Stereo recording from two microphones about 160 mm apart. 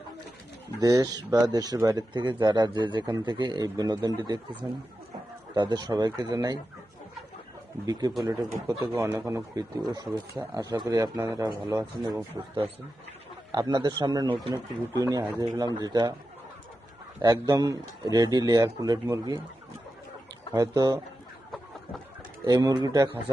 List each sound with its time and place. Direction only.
0.8 s speech: 20° right (ahead or behind)
5.5 s speech: 25° right (ahead or behind)
8.2 s speech: 20° right (ahead or behind)
13.5 s speech: 25° right (ahead or behind)
17.2 s speech: 25° right (ahead or behind)
20.5 s speech: 20° right (ahead or behind)
22.4 s speech: 25° right (ahead or behind)